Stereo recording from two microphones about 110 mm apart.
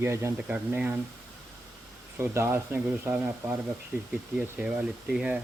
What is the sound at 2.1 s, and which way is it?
Speech, 20° right (ahead or behind).